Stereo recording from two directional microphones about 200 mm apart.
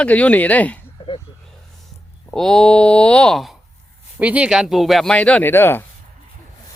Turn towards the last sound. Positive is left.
turn(degrees=10)  # may be behind; listen again after turning